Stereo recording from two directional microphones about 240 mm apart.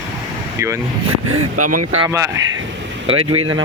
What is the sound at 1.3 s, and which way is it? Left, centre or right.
Speech, right.